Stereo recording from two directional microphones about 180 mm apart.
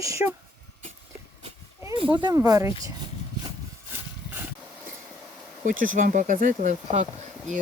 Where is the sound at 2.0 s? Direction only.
25° right (ahead or behind).